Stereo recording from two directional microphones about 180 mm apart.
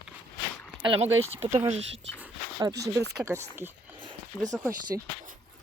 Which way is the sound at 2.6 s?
20° right (ahead or behind).